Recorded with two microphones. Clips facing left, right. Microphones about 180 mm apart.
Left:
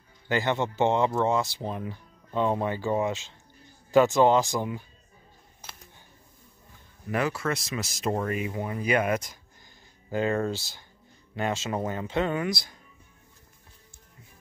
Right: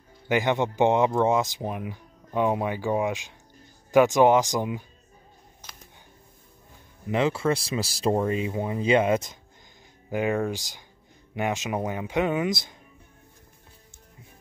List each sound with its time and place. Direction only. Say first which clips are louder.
0.3 s speech: right 3 dB; 15° right (ahead or behind)
7.1 s speech: right 4 dB; 25° right (ahead or behind)